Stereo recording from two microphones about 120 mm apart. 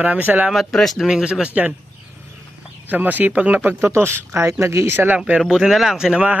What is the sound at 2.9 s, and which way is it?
Speech, 15° right (ahead or behind).